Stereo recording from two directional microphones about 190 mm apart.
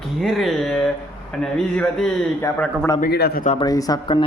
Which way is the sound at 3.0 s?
55° left (ahead or behind).